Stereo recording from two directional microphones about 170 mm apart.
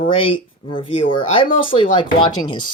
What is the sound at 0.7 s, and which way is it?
Speech, 30° left (ahead or behind).